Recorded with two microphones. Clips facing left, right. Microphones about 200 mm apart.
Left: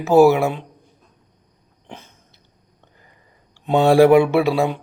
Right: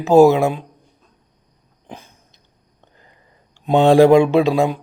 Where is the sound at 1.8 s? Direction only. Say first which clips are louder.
Right 2 dB; 10° right (ahead or behind).